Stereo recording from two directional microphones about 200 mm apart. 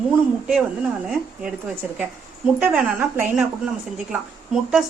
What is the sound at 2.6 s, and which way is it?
A woman's voice, 5° right (ahead or behind).